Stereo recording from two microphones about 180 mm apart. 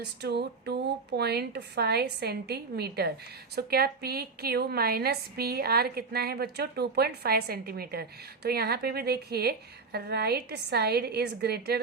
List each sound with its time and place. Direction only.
0.0 s a woman's voice: 65° right (ahead or behind)